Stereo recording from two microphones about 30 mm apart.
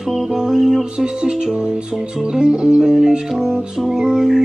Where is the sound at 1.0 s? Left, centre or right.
Right.